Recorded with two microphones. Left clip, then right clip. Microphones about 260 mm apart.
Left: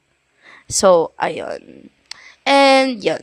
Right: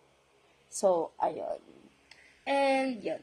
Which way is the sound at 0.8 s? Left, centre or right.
Left.